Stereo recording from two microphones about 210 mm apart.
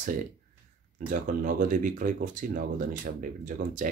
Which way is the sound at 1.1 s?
40° right (ahead or behind).